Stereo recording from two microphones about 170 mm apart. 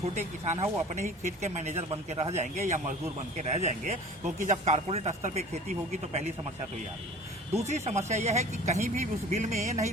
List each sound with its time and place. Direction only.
0.0 s speech: 45° right (ahead or behind)
7.6 s speech: 40° right (ahead or behind)